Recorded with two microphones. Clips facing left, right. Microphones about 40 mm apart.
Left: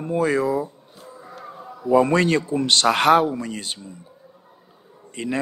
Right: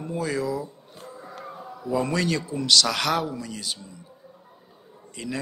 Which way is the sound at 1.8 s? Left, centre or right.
Left.